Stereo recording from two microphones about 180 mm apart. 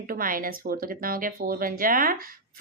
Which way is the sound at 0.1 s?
50° right (ahead or behind).